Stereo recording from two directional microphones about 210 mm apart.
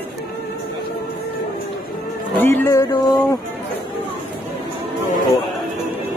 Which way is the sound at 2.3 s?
10° left (ahead or behind).